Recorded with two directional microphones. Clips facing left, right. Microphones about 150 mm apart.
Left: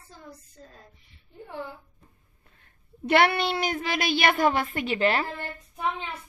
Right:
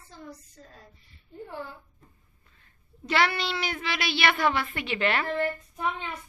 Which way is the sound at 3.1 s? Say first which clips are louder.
Left 5 dB; 55° left (ahead or behind).